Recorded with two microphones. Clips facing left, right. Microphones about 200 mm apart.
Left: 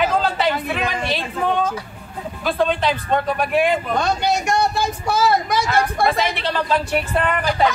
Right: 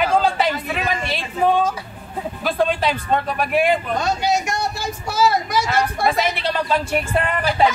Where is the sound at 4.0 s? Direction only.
60° left (ahead or behind).